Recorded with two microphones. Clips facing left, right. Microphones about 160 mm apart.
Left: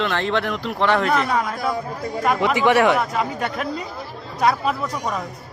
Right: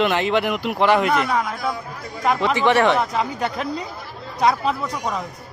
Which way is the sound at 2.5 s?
10° left (ahead or behind).